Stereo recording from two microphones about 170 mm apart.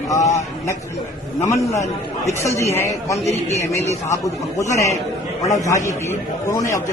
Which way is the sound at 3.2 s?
40° left (ahead or behind).